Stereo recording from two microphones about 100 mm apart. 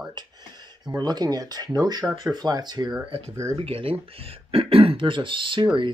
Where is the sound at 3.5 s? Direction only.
70° right (ahead or behind).